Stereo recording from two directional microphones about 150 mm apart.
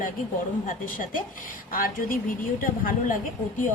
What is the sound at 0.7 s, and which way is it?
A woman's voice, 65° left (ahead or behind).